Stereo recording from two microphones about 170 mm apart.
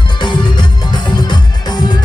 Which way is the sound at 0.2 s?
25° left (ahead or behind).